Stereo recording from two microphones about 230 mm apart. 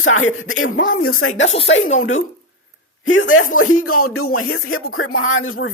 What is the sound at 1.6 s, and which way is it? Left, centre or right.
Speech, left.